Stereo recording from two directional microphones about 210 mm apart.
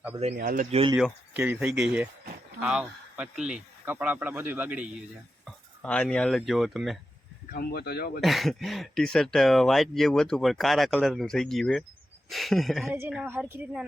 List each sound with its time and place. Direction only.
0.3 s speech: 40° right (ahead or behind)
0.9 s speech: 5° right (ahead or behind)
5.5 s speech: 5° left (ahead or behind)
7.5 s speech: 45° left (ahead or behind)
8.2 s speech: centre (ahead or behind)